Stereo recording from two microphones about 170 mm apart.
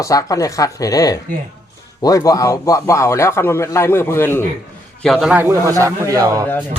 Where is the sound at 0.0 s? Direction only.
20° left (ahead or behind).